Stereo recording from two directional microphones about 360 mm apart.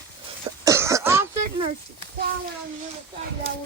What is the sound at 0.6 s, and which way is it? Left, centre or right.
Throat clearing, centre.